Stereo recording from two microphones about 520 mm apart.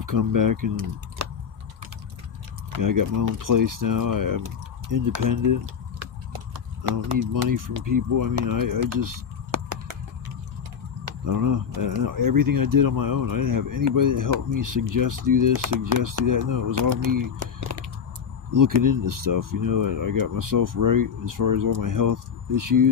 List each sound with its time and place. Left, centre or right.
0.0 s speech: right
1.2 s typing: right
2.8 s speech: right
7.4 s speech: right
11.3 s speech: right
17.6 s a sound: right
18.5 s speech: right